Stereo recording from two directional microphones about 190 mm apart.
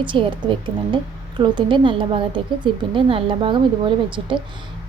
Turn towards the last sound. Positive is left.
turn(degrees=-25)  # may be behind; listen again after turning